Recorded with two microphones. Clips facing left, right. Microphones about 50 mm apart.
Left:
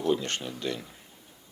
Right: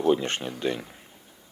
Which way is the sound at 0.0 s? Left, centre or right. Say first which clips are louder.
Right 4 dB; right.